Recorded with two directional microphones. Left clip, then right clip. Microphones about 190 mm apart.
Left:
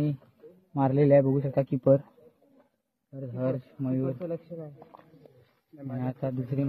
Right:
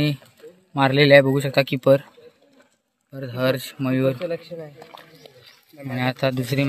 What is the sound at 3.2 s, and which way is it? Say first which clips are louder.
Speech: right 9 dB; 5° right (ahead or behind).